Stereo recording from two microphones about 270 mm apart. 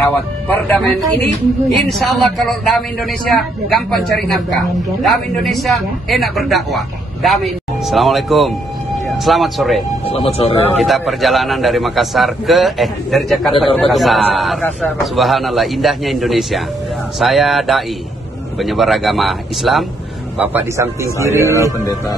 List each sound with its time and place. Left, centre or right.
0.1 s speech: centre
1.9 s a man's voice: centre
10.0 s speech: left
10.9 s a man's voice: centre
21.5 s speech: centre